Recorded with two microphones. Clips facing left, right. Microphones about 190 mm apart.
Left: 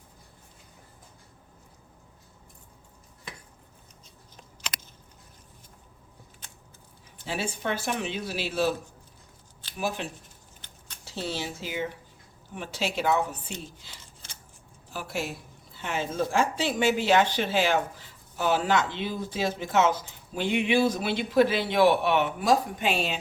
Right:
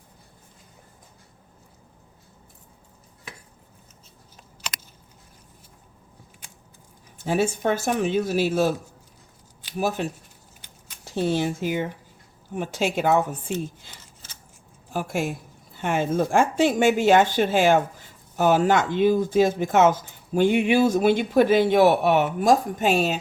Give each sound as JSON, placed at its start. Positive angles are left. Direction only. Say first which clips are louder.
{"t": 6.4, "sound": "a sound", "louder": "even", "side_deg": -10}
{"t": 7.3, "sound": "speech", "louder": "right 8 dB", "side_deg": -45}
{"t": 9.7, "sound": "speech", "louder": "right 6 dB", "side_deg": -45}
{"t": 14.9, "sound": "speech", "louder": "right 7 dB", "side_deg": -50}